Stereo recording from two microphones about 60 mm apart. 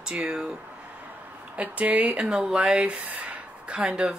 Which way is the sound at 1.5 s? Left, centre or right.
Right.